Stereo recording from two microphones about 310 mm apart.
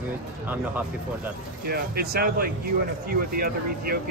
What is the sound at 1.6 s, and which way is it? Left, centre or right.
Speech, right.